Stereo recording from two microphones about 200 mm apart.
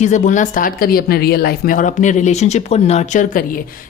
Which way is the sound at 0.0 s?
35° left (ahead or behind).